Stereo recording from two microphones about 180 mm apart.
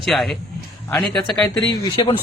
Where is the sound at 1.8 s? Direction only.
25° left (ahead or behind).